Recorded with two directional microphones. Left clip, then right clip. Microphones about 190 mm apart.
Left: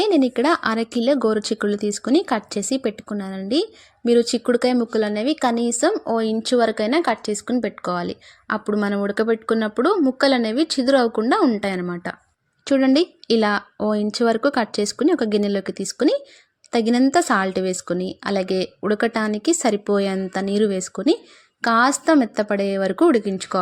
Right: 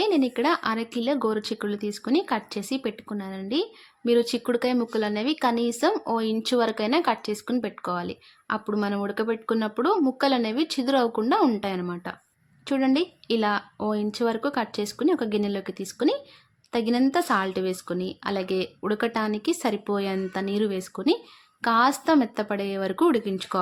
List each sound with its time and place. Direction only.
0.0 s speech: 20° left (ahead or behind)